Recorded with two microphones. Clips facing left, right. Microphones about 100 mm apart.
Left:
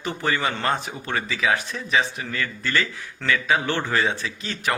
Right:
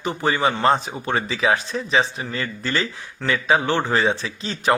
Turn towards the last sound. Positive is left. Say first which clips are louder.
# right 5 dB
turn(degrees=-20)  # may be behind; listen again after turning